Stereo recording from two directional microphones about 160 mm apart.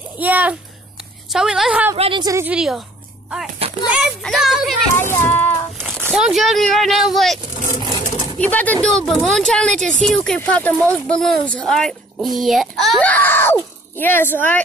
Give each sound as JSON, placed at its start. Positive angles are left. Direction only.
{"t": 0.2, "sound": "speech", "side_deg": -10}
{"t": 2.0, "sound": "a woman's voice", "side_deg": -35}
{"t": 2.2, "sound": "speech", "side_deg": -20}
{"t": 2.5, "sound": "speech", "side_deg": -5}
{"t": 3.9, "sound": "speech", "side_deg": 0}
{"t": 4.9, "sound": "child singing", "side_deg": 15}
{"t": 5.9, "sound": "a sound", "side_deg": -15}
{"t": 6.1, "sound": "speech", "side_deg": 0}
{"t": 7.8, "sound": "pigeon", "side_deg": -30}
{"t": 8.4, "sound": "speech", "side_deg": 10}
{"t": 13.1, "sound": "speech", "side_deg": 10}